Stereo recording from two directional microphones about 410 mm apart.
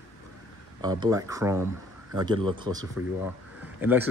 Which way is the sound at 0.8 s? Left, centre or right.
Centre.